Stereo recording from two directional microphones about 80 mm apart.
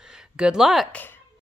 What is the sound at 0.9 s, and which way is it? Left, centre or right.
Speech, left.